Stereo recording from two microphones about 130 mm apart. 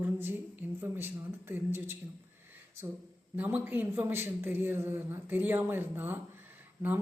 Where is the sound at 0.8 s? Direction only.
15° right (ahead or behind).